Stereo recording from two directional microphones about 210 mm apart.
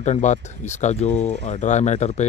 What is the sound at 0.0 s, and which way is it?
Speech, 35° left (ahead or behind).